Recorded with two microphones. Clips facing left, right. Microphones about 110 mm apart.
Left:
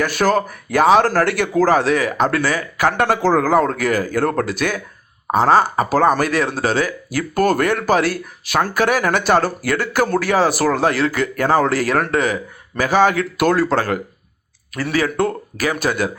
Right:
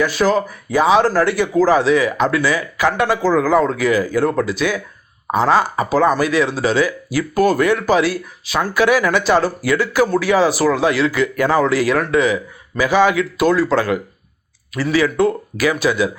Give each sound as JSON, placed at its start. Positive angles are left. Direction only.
{"t": 0.0, "sound": "speech", "side_deg": 55}
{"t": 3.0, "sound": "speech", "side_deg": 65}
{"t": 5.3, "sound": "speech", "side_deg": 45}
{"t": 13.3, "sound": "speech", "side_deg": 60}